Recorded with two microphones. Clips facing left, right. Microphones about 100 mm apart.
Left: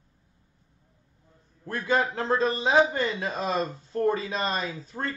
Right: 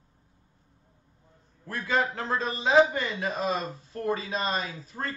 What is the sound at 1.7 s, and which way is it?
A man's voice, 30° left (ahead or behind).